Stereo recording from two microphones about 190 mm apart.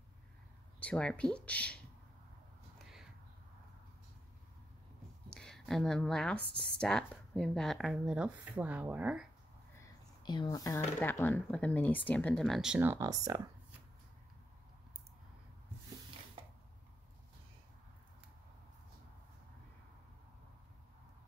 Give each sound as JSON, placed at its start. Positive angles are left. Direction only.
{"t": 0.7, "sound": "speech", "side_deg": 5}
{"t": 2.8, "sound": "a sound", "side_deg": 0}
{"t": 5.3, "sound": "speech", "side_deg": 5}
{"t": 10.2, "sound": "speech", "side_deg": 20}